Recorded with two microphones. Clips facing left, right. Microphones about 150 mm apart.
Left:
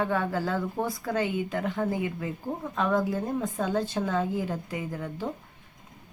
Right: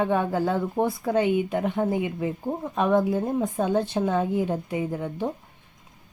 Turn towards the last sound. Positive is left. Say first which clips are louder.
# right 6 dB
turn(degrees=-20)  # may be behind; listen again after turning